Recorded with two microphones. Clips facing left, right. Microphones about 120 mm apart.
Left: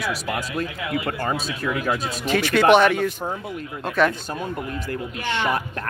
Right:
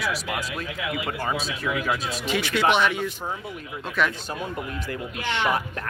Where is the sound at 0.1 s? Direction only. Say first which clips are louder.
Left 3 dB; 45° left (ahead or behind).